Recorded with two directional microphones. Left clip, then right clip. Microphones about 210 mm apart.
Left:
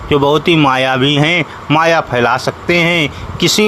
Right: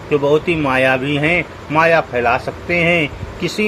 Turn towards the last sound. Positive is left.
turn(degrees=55)  # may be behind; listen again after turning